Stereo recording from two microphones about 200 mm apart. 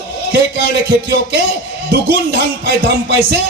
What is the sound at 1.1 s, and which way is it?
Speech, 55° right (ahead or behind).